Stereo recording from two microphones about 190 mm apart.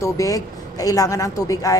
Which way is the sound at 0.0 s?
15° left (ahead or behind).